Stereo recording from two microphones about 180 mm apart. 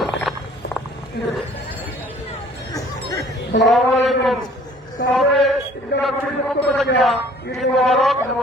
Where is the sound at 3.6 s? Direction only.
Centre (ahead or behind).